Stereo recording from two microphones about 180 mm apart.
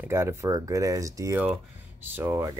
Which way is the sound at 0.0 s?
15° right (ahead or behind).